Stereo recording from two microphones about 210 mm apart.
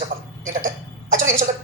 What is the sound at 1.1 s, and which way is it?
Throat clearing, 35° right (ahead or behind).